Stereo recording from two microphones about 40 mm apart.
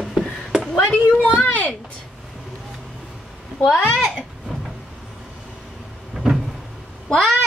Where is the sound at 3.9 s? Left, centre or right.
Centre.